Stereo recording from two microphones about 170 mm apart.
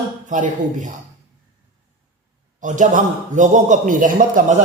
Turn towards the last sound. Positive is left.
turn(degrees=-50)  # may be behind; listen again after turning